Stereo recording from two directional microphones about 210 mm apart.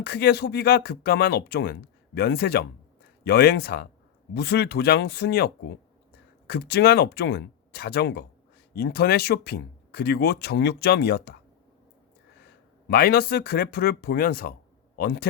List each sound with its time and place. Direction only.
0.0 s speech: 50° left (ahead or behind)
6.5 s speech: 50° left (ahead or behind)
12.9 s a man's voice: 45° left (ahead or behind)